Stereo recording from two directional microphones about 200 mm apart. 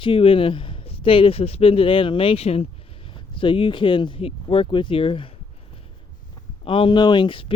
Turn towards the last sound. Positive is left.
turn(degrees=25)  # may be behind; listen again after turning